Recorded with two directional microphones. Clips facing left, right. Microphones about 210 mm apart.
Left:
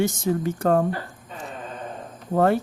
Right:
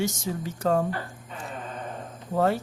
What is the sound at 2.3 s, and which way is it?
Speech, 55° left (ahead or behind).